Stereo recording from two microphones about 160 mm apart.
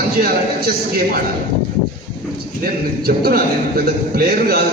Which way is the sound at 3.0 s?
70° right (ahead or behind).